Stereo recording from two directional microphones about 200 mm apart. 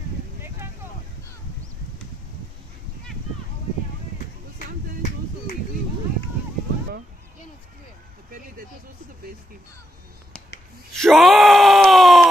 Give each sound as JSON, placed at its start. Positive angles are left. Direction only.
{"t": 11.0, "sound": "groan", "side_deg": 0}